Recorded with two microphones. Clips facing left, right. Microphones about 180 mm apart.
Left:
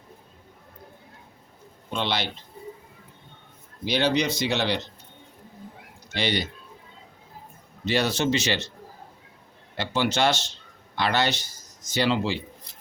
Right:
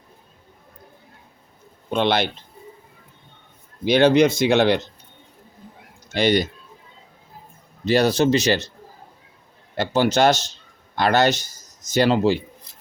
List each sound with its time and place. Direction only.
1.9 s speech: 55° right (ahead or behind)
3.8 s speech: 55° right (ahead or behind)
6.1 s speech: 45° right (ahead or behind)
7.9 s speech: 40° right (ahead or behind)
9.7 s speech: 45° right (ahead or behind)